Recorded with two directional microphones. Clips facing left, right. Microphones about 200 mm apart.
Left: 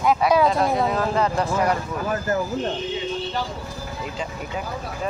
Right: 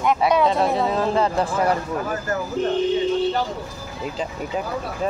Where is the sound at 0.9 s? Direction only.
30° right (ahead or behind).